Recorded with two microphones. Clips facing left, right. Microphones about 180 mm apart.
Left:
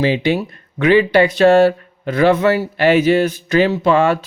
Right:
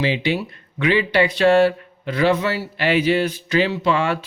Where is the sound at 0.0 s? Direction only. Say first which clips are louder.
Left 5 dB; 45° left (ahead or behind).